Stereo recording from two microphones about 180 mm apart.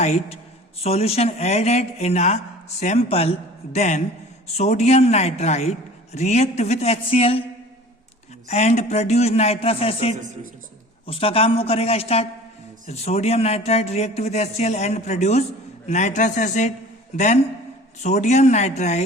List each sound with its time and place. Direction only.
0.0 s speech: 35° left (ahead or behind)
8.4 s speech: 40° left (ahead or behind)